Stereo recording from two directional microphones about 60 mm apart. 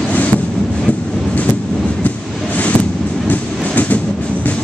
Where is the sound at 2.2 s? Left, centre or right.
Centre.